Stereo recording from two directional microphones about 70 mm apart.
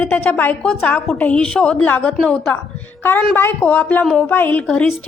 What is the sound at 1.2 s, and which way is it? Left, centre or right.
A woman's voice, centre.